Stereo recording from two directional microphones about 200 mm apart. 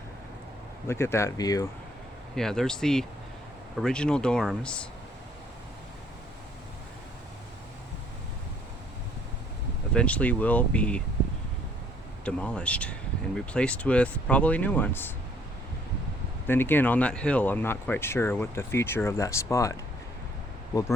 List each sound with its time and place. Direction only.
0.9 s speech: 15° left (ahead or behind)
2.3 s speech: centre (ahead or behind)
9.9 s speech: 5° left (ahead or behind)
12.2 s speech: 5° left (ahead or behind)
16.5 s speech: 10° left (ahead or behind)